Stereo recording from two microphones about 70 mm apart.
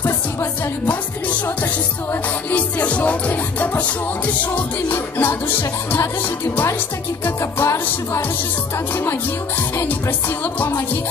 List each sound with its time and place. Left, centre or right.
2.5 s music: centre; by 6.0 s left
7.2 s music: left
9.6 s music: left